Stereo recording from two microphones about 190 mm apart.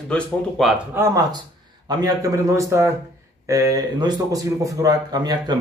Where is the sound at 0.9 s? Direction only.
15° right (ahead or behind).